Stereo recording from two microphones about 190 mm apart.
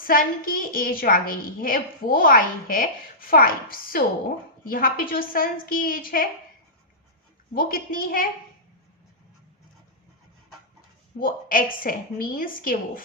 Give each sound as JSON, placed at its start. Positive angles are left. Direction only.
{"t": 0.1, "sound": "a woman's voice", "side_deg": 50}
{"t": 7.5, "sound": "a woman's voice", "side_deg": 50}
{"t": 11.2, "sound": "a woman's voice", "side_deg": 50}